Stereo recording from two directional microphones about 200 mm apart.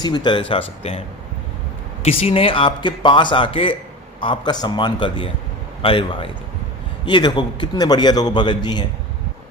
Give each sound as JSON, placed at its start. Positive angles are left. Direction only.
{"t": 0.0, "sound": "a man's voice", "side_deg": 20}